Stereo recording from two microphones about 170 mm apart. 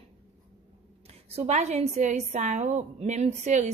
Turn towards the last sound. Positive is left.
turn(degrees=-45)  # may be behind; listen again after turning